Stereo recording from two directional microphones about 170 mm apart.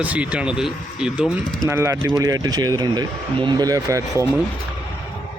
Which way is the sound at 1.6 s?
15° right (ahead or behind).